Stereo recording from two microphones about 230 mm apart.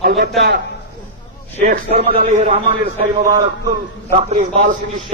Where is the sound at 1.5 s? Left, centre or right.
Right.